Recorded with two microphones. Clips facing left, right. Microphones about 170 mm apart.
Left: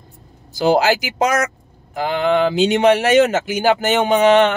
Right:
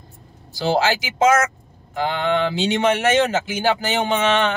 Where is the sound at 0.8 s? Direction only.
40° left (ahead or behind).